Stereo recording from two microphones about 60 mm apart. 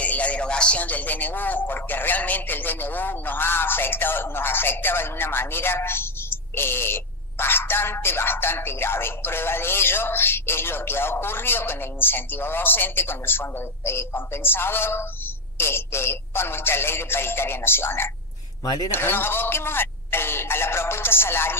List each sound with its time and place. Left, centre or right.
0.0 s speech: left